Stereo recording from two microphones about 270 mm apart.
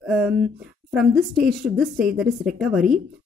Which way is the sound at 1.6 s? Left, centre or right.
Centre.